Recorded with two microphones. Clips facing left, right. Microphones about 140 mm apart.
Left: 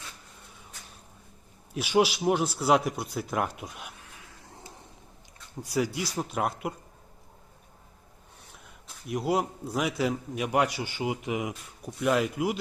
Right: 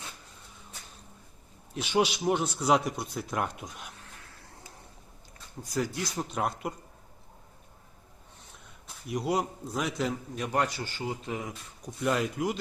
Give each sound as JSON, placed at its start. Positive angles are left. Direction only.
{"t": 1.7, "sound": "speech", "side_deg": 5}
{"t": 5.6, "sound": "speech", "side_deg": 10}
{"t": 9.0, "sound": "a man's voice", "side_deg": 0}
{"t": 11.9, "sound": "speech", "side_deg": 0}